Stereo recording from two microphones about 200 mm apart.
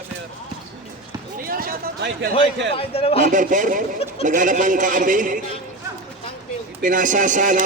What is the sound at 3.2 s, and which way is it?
Speech, 40° right (ahead or behind).